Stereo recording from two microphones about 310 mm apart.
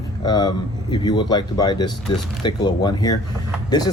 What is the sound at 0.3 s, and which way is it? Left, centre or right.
Speech, centre.